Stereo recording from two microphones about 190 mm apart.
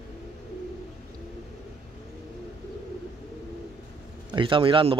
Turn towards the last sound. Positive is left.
turn(degrees=-25)  # may be behind; listen again after turning